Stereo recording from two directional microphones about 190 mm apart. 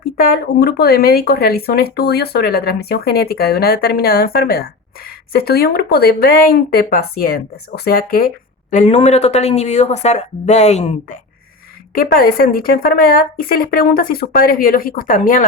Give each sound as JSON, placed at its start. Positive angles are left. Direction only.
{"t": 0.0, "sound": "speech", "side_deg": 50}
{"t": 8.7, "sound": "speech", "side_deg": 40}
{"t": 11.9, "sound": "speech", "side_deg": 50}